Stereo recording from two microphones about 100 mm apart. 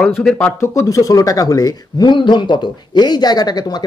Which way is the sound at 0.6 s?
30° left (ahead or behind).